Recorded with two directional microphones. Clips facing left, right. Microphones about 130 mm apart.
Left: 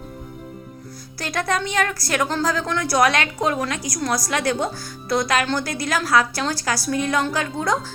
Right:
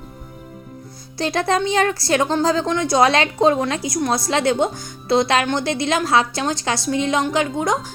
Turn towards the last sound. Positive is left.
turn(degrees=-20)  # may be behind; listen again after turning